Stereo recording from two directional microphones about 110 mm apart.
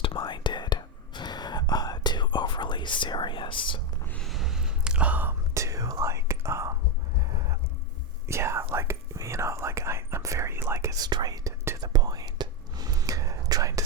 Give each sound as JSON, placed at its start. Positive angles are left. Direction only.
{"t": 0.0, "sound": "whispering", "side_deg": 50}
{"t": 4.2, "sound": "a sound", "side_deg": 0}
{"t": 5.5, "sound": "whispering", "side_deg": -30}
{"t": 8.3, "sound": "whispering", "side_deg": -25}